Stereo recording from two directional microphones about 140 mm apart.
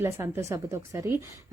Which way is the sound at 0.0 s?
20° right (ahead or behind).